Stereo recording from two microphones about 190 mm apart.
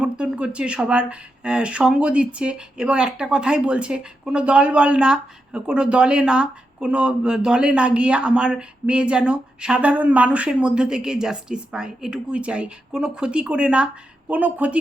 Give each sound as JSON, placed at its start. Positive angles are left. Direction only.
{"t": 0.0, "sound": "speech", "side_deg": -5}